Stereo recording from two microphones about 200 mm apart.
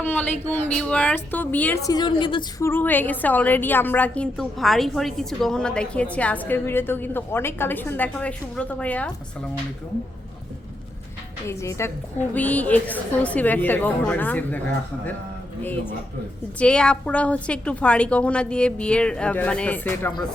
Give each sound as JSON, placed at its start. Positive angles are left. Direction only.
{"t": 0.0, "sound": "a woman's voice", "side_deg": 10}
{"t": 1.9, "sound": "a woman's voice", "side_deg": 20}
{"t": 2.6, "sound": "a woman's voice", "side_deg": 10}
{"t": 11.4, "sound": "a woman's voice", "side_deg": 15}
{"t": 15.6, "sound": "a woman's voice", "side_deg": 10}